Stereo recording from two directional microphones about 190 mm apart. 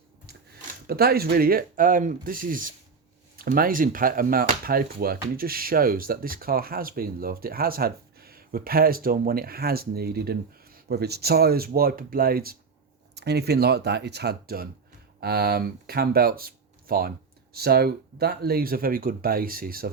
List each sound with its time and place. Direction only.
0.3 s speech: 55° right (ahead or behind)